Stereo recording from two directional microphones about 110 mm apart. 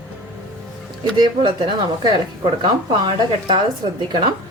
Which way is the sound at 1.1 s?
45° right (ahead or behind).